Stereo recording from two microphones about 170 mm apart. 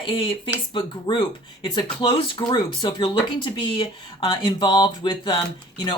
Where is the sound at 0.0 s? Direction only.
30° left (ahead or behind).